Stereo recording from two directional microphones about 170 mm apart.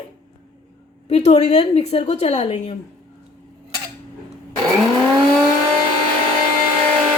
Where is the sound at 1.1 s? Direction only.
40° left (ahead or behind).